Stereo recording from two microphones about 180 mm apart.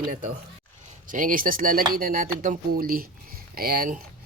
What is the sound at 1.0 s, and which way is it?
Speech, 50° right (ahead or behind).